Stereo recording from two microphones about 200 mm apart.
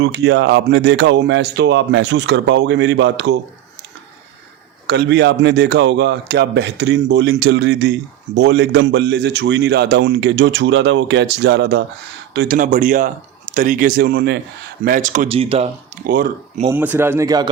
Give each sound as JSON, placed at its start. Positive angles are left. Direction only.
{"t": 0.0, "sound": "a man's voice", "side_deg": -60}
{"t": 4.9, "sound": "a man's voice", "side_deg": -60}
{"t": 12.5, "sound": "speech", "side_deg": -40}
{"t": 16.0, "sound": "speech", "side_deg": -45}
{"t": 16.7, "sound": "speech", "side_deg": -10}